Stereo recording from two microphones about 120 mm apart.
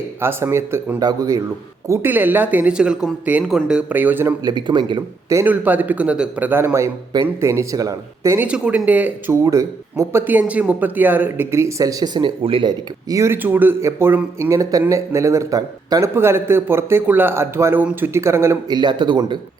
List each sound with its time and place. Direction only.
0.2 s speech: 20° right (ahead or behind)
0.9 s speech: 30° right (ahead or behind)
1.9 s speech: 15° right (ahead or behind)
4.4 s speech: 40° right (ahead or behind)
5.5 s speech: 15° right (ahead or behind)
8.4 s speech: 10° right (ahead or behind)
9.4 s speech: 25° right (ahead or behind)
12.4 s speech: 45° right (ahead or behind)
13.1 s speech: 25° right (ahead or behind)
18.7 s speech: 40° right (ahead or behind)